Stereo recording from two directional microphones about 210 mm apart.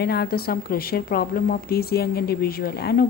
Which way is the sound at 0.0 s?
50° left (ahead or behind).